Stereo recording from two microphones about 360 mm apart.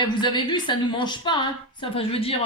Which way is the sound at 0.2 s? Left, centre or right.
Centre.